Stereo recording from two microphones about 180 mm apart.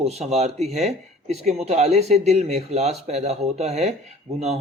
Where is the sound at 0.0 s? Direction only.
35° right (ahead or behind).